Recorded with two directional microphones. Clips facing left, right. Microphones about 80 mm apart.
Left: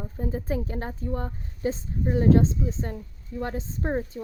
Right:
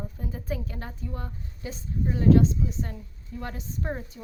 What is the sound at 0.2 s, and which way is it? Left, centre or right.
A woman's voice, left.